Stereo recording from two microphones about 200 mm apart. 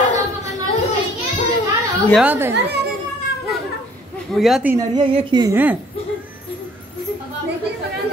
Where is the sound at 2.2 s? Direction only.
10° right (ahead or behind).